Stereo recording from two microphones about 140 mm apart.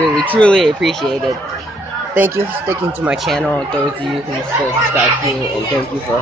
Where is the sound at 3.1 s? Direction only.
Centre (ahead or behind).